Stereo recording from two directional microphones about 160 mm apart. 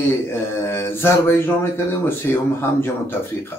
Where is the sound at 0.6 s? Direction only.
15° left (ahead or behind).